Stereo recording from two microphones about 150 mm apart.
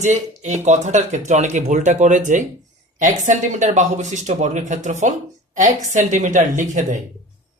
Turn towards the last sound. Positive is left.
turn(degrees=-55)  # may be behind; listen again after turning